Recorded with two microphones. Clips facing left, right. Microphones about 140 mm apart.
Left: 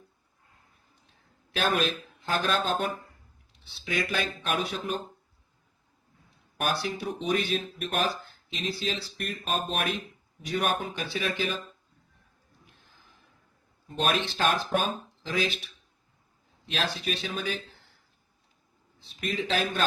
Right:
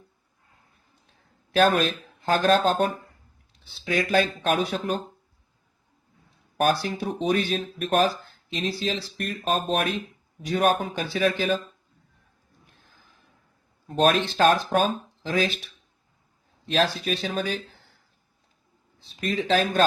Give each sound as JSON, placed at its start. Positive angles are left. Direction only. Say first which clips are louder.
{"t": 1.5, "sound": "speech", "louder": "right 7 dB", "side_deg": -40}
{"t": 6.6, "sound": "speech", "louder": "right 6 dB", "side_deg": -40}
{"t": 13.8, "sound": "speech", "louder": "right 7 dB", "side_deg": -40}
{"t": 16.6, "sound": "speech", "louder": "right 7 dB", "side_deg": -40}
{"t": 19.2, "sound": "speech", "louder": "right 5 dB", "side_deg": -40}